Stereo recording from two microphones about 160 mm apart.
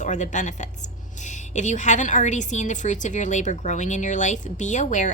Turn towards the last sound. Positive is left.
turn(degrees=50)  # may be behind; listen again after turning